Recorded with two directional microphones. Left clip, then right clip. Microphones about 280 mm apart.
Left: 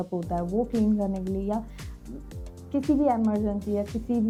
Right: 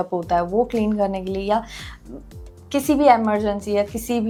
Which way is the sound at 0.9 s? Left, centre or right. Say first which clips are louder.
Right 8 dB; centre.